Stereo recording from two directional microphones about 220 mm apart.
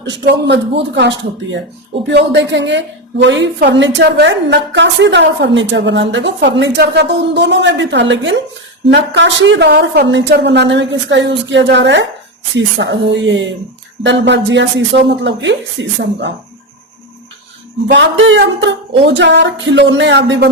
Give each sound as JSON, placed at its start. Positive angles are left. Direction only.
{"t": 0.2, "sound": "a woman's voice", "side_deg": -55}
{"t": 17.8, "sound": "a woman's voice", "side_deg": -55}